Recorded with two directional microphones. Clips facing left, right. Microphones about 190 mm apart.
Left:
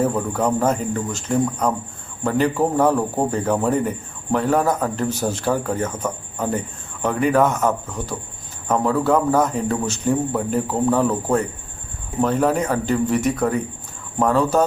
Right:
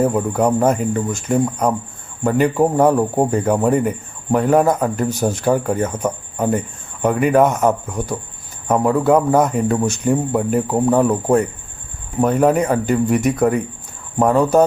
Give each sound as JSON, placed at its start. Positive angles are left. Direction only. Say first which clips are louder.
{"t": 0.0, "sound": "a man's voice", "louder": "right 4 dB", "side_deg": -15}